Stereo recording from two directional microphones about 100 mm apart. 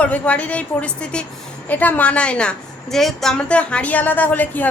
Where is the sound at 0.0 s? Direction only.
15° left (ahead or behind).